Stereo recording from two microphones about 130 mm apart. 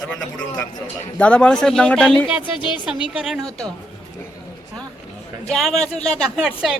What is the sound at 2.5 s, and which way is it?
Speech, 35° left (ahead or behind).